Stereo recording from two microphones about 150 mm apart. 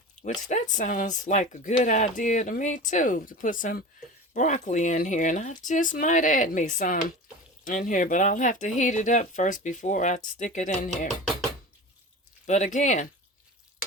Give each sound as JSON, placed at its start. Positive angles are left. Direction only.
{"t": 0.2, "sound": "speech", "side_deg": 55}
{"t": 10.3, "sound": "chopping", "side_deg": 55}
{"t": 12.5, "sound": "chopping", "side_deg": 55}